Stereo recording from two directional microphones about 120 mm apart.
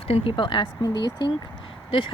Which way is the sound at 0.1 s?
45° left (ahead or behind).